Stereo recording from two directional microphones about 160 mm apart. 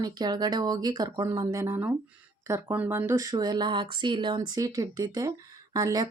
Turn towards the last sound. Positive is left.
turn(degrees=-25)  # may be behind; listen again after turning